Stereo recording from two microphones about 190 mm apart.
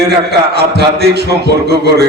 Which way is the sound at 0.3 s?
60° right (ahead or behind).